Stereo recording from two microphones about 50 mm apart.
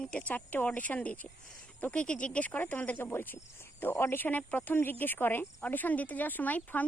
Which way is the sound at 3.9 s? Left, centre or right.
Left.